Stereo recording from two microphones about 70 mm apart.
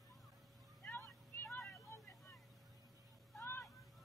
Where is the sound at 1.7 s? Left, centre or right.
Left.